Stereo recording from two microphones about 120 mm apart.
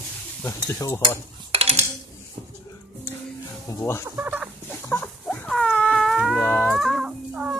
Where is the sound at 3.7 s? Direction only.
30° left (ahead or behind).